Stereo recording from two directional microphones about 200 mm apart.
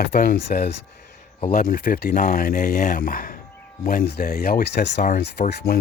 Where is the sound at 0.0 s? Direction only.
50° left (ahead or behind).